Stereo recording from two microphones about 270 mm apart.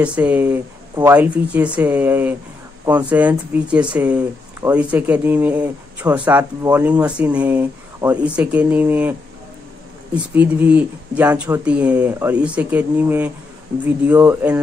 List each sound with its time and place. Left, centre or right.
0.0 s speech: centre
10.1 s speech: centre